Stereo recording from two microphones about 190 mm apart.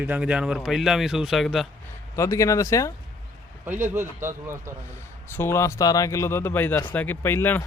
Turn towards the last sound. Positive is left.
turn(degrees=10)  # may be behind; listen again after turning